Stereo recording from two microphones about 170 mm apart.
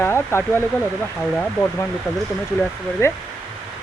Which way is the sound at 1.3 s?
5° left (ahead or behind).